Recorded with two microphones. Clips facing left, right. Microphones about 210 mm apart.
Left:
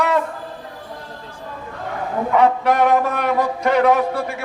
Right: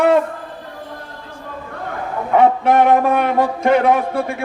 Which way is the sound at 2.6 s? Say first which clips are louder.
Right 3 dB; 50° right (ahead or behind).